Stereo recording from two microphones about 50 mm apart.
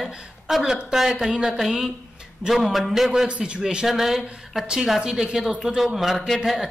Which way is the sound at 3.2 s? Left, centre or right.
Right.